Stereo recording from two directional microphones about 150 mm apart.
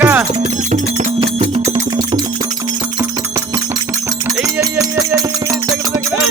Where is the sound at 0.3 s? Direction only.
50° right (ahead or behind).